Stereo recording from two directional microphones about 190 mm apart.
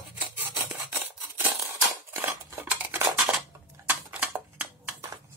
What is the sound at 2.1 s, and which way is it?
Dishes, 10° right (ahead or behind).